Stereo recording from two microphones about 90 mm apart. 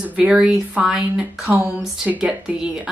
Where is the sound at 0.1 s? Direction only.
10° right (ahead or behind).